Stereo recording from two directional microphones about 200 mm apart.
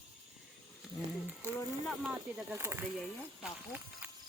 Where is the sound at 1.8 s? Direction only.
5° right (ahead or behind).